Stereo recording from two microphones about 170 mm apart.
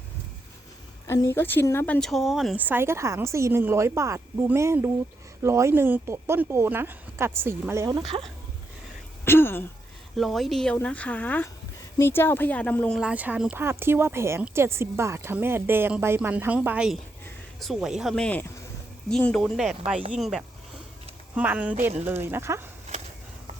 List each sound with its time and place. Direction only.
1.0 s speech: 15° left (ahead or behind)
2.0 s speech: centre (ahead or behind); by 7.9 s 15° right (ahead or behind)
8.1 s speech: 35° right (ahead or behind)
9.2 s speech: 15° left (ahead or behind)
10.2 s speech: centre (ahead or behind)
13.0 s speech: 5° right (ahead or behind)